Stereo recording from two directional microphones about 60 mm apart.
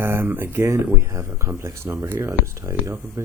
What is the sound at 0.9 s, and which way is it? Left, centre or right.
Speech, right.